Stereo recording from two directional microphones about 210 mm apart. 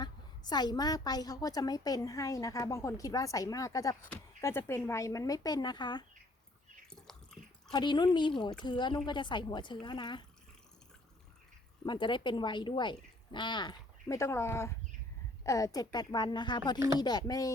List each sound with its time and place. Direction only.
0.0 s a woman's voice: 20° left (ahead or behind)
6.9 s a sound: 5° left (ahead or behind)
7.7 s speech: 20° left (ahead or behind)
11.9 s a woman's voice: 20° left (ahead or behind)